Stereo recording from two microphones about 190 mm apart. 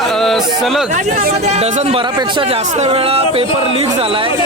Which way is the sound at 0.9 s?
40° right (ahead or behind).